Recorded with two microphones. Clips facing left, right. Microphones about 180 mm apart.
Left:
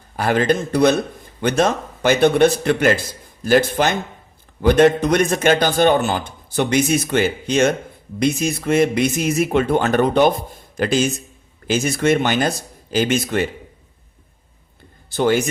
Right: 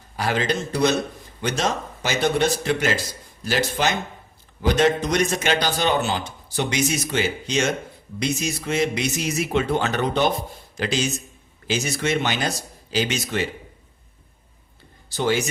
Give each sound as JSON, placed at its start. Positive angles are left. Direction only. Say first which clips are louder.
{"t": 0.2, "sound": "a man's voice", "louder": "left 6 dB", "side_deg": 55}
{"t": 15.1, "sound": "speech", "louder": "left 5 dB", "side_deg": 55}